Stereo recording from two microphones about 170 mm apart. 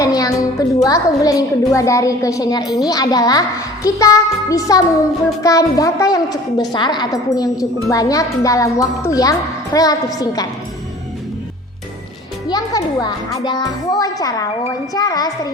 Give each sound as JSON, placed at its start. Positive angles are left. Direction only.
{"t": 0.0, "sound": "a woman's voice", "side_deg": 20}
{"t": 12.5, "sound": "a woman's voice", "side_deg": 20}